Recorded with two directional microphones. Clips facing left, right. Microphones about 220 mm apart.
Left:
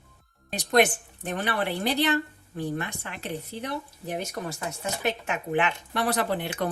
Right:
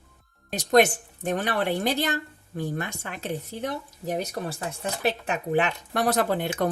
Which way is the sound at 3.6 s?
40° right (ahead or behind).